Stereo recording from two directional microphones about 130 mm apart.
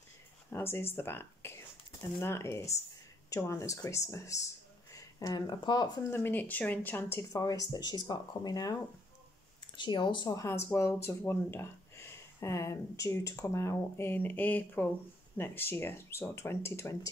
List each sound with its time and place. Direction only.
0.5 s a sound: 20° left (ahead or behind)
0.9 s speech: 20° left (ahead or behind); by 5.9 s 35° left (ahead or behind)
6.0 s speech: 20° left (ahead or behind)
9.8 s speech: 35° left (ahead or behind)
10.3 s speech: 20° left (ahead or behind)